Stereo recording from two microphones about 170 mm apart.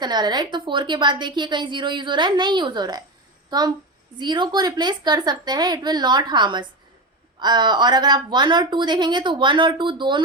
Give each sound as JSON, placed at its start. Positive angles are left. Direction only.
{"t": 0.0, "sound": "a woman's voice", "side_deg": -25}
{"t": 4.2, "sound": "a woman's voice", "side_deg": -25}